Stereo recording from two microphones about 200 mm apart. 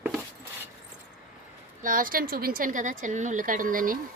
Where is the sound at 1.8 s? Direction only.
45° right (ahead or behind).